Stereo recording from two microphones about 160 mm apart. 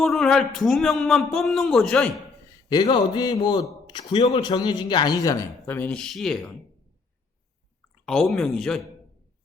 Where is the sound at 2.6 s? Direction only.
25° left (ahead or behind).